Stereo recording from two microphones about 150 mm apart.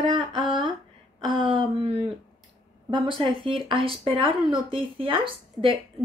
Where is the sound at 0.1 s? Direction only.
35° right (ahead or behind).